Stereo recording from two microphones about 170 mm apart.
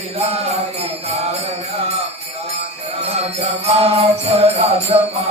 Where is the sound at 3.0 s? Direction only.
40° right (ahead or behind).